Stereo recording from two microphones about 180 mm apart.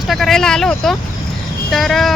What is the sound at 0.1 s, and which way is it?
Vehicle, centre (ahead or behind).